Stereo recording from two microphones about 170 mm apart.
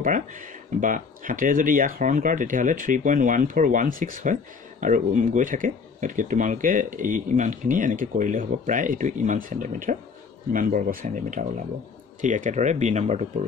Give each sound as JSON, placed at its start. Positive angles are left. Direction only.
{"t": 0.7, "sound": "speech", "side_deg": -50}